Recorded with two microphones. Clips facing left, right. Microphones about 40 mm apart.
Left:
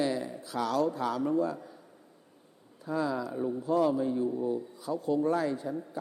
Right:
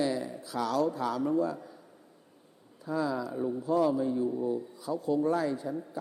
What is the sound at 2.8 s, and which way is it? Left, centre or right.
Speech, left.